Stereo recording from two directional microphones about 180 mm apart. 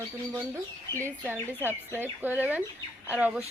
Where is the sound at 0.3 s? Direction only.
15° right (ahead or behind).